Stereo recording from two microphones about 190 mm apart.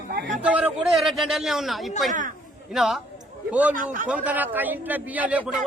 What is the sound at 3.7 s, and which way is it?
Speech, 45° right (ahead or behind).